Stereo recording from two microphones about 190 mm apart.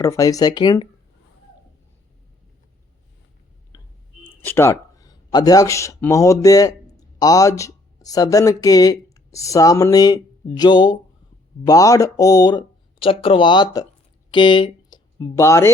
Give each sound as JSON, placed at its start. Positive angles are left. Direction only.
{"t": 0.0, "sound": "speech", "side_deg": 20}
{"t": 4.4, "sound": "speech", "side_deg": 15}